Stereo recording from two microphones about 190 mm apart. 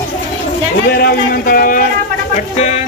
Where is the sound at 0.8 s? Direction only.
55° left (ahead or behind).